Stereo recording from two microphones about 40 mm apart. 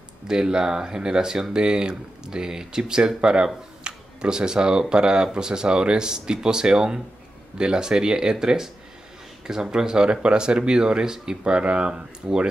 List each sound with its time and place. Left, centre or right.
0.3 s speech: centre